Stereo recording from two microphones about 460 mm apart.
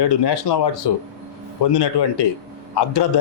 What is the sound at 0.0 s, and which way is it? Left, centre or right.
Speech, left.